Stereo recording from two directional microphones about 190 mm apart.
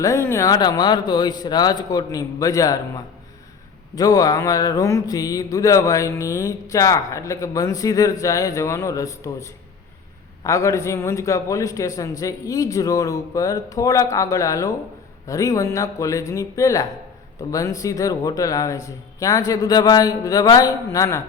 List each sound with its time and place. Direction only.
0.0 s a man's voice: 15° left (ahead or behind)